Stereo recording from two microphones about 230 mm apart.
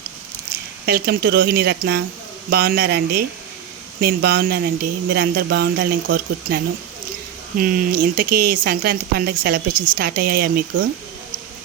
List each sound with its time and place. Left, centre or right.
0.9 s speech: right
7.6 s speech: right